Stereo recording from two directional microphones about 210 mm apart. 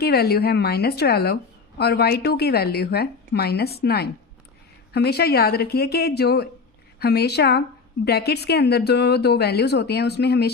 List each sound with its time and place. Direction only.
0.0 s a woman's voice: 50° left (ahead or behind)